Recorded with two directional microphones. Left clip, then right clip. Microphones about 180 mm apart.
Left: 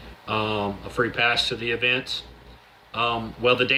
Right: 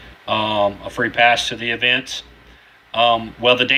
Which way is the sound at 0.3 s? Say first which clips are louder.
Right 8 dB; 50° right (ahead or behind).